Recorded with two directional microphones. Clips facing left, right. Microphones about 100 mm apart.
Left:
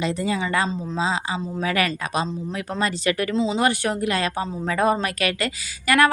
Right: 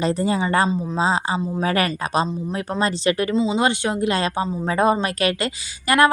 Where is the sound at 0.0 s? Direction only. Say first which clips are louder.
Right 3 dB; 35° right (ahead or behind).